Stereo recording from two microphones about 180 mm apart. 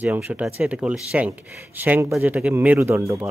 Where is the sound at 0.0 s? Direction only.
10° right (ahead or behind).